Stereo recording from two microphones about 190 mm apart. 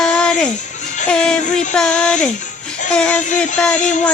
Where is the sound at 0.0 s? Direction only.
5° left (ahead or behind).